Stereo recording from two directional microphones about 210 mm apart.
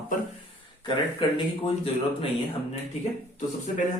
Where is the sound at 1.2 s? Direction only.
20° left (ahead or behind).